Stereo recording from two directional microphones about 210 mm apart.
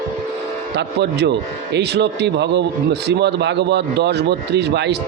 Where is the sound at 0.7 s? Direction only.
55° right (ahead or behind).